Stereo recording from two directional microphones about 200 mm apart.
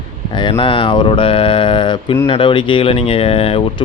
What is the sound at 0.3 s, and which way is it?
Mantra, 25° left (ahead or behind).